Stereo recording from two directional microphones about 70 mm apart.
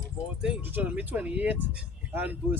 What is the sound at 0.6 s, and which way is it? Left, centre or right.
Speech, right.